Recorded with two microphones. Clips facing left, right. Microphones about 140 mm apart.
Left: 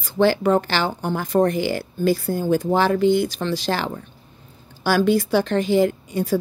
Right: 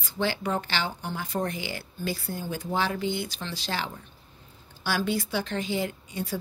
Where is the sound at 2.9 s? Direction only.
60° left (ahead or behind); by 4.0 s 75° left (ahead or behind).